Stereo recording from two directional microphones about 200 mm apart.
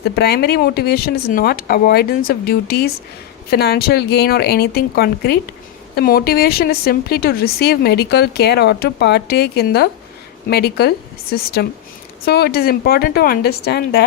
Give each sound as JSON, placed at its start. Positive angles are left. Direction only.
{"t": 0.0, "sound": "speech", "side_deg": 55}